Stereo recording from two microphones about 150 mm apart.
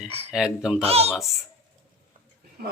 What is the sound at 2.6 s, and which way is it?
Speech, 90° right.